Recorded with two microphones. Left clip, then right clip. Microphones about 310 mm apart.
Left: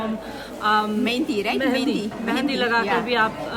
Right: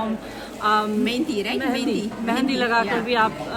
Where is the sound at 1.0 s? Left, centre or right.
Centre.